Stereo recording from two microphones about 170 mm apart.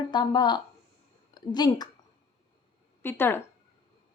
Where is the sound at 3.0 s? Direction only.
15° left (ahead or behind).